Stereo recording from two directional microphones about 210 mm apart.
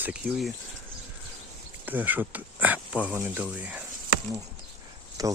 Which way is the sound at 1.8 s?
10° right (ahead or behind).